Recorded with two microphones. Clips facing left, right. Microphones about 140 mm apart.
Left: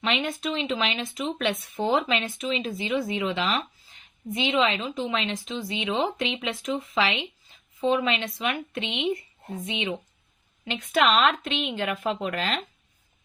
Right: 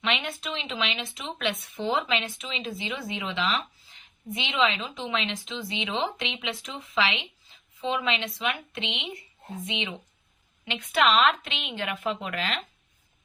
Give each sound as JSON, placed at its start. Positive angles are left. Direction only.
{"t": 0.0, "sound": "speech", "side_deg": 40}
{"t": 10.7, "sound": "speech", "side_deg": 45}